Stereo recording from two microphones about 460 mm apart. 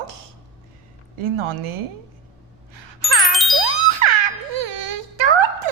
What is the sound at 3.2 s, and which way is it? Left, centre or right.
Jingle, centre.